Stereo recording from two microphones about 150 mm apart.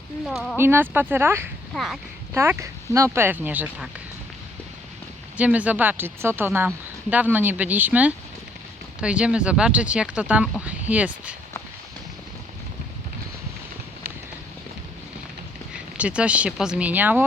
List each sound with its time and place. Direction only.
0.3 s speech: centre (ahead or behind)
0.5 s speech: 15° right (ahead or behind)
1.7 s speech: centre (ahead or behind)
2.3 s speech: 15° right (ahead or behind)
5.4 s speech: 10° right (ahead or behind)
15.7 s speech: 5° right (ahead or behind)